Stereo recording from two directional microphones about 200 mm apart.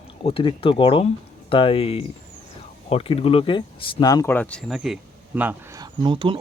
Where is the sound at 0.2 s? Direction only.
25° left (ahead or behind).